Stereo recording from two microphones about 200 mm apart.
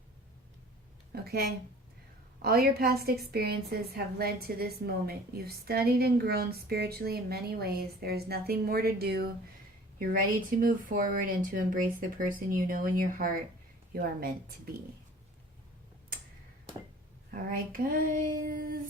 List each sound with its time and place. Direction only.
1.1 s a woman's voice: 50° right (ahead or behind)
10.6 s a woman's voice: 45° right (ahead or behind)
17.5 s a woman's voice: 45° right (ahead or behind)